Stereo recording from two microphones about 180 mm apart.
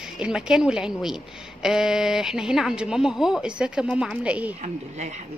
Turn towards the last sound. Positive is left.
turn(degrees=-40)  # may be behind; listen again after turning